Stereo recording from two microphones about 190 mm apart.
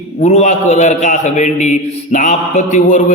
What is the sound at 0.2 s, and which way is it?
A man's voice, 40° left (ahead or behind).